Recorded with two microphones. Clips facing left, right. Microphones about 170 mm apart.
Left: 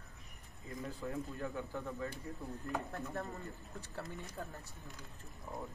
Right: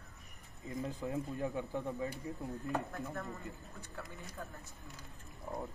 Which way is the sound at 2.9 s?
35° left (ahead or behind).